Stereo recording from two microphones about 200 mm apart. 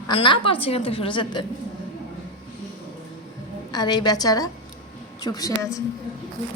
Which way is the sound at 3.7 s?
20° left (ahead or behind).